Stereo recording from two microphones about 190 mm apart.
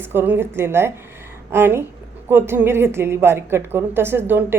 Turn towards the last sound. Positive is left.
turn(degrees=-10)  # may be behind; listen again after turning